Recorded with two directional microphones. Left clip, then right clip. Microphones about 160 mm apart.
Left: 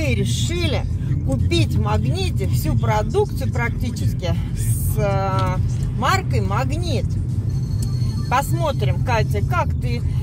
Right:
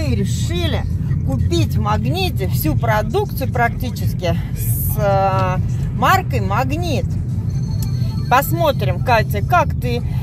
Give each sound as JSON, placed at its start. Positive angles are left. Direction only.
{"t": 0.0, "sound": "speech", "side_deg": 0}
{"t": 1.9, "sound": "speech", "side_deg": -60}
{"t": 4.9, "sound": "speech", "side_deg": -50}
{"t": 8.3, "sound": "speech", "side_deg": -65}